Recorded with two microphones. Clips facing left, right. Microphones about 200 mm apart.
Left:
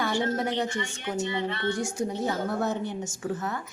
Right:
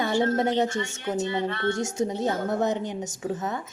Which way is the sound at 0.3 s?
25° right (ahead or behind).